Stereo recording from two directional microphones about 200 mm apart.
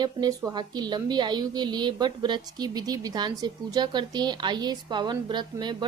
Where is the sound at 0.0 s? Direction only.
20° right (ahead or behind).